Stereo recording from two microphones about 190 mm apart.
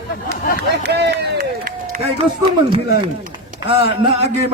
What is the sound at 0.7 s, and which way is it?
Run, 65° right (ahead or behind).